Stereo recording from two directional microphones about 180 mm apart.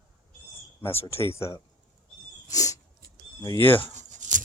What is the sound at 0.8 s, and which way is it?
Speech, 15° left (ahead or behind).